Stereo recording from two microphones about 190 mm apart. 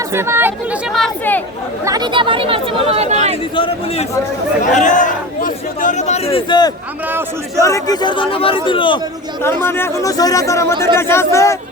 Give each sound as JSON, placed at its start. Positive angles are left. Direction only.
{"t": 0.1, "sound": "speech", "side_deg": -15}
{"t": 0.9, "sound": "speech", "side_deg": 5}
{"t": 1.8, "sound": "speech", "side_deg": -20}
{"t": 3.5, "sound": "a man's voice", "side_deg": 25}
{"t": 4.7, "sound": "speech", "side_deg": 40}
{"t": 7.1, "sound": "a man's voice", "side_deg": -10}
{"t": 7.6, "sound": "a man's voice", "side_deg": 15}
{"t": 9.4, "sound": "speech", "side_deg": 10}